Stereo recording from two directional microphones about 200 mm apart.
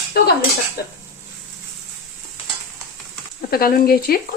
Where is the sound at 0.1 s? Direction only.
50° left (ahead or behind).